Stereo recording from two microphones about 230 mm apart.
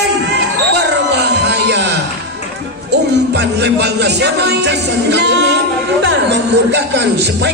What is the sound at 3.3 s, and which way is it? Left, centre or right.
Music, right.